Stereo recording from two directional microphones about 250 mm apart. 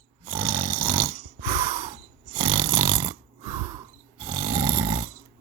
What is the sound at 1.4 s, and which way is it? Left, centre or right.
Breathing, right.